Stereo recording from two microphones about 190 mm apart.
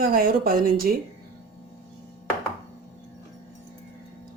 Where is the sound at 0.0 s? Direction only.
50° right (ahead or behind).